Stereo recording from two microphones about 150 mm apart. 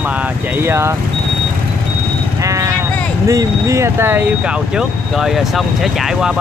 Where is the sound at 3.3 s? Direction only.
20° right (ahead or behind).